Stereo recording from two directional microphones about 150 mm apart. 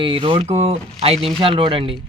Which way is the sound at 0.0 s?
35° right (ahead or behind).